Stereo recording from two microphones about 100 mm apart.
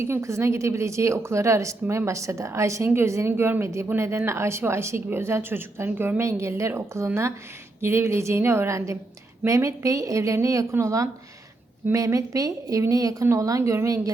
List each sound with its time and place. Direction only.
0.0 s a woman's voice: 30° right (ahead or behind)